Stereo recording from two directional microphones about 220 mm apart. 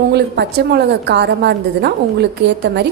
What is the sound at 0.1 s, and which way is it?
A woman's voice, 50° right (ahead or behind).